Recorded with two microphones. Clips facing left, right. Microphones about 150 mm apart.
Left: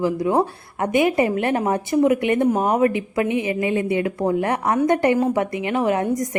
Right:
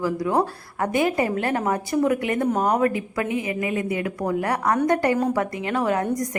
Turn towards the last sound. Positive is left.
turn(degrees=20)  # may be behind; listen again after turning